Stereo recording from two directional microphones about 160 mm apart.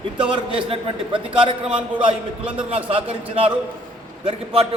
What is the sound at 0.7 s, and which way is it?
A man's voice, 30° right (ahead or behind).